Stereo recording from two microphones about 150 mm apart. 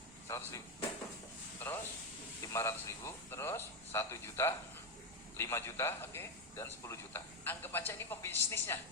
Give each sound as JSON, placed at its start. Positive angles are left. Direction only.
{"t": 0.3, "sound": "speech", "side_deg": 20}
{"t": 1.5, "sound": "a sound", "side_deg": 15}
{"t": 2.5, "sound": "a man's voice", "side_deg": 20}